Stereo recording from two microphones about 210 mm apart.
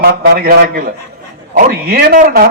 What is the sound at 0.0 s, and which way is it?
A man's voice, 45° right (ahead or behind).